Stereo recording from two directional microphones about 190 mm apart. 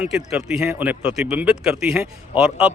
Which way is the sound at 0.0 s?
5° right (ahead or behind).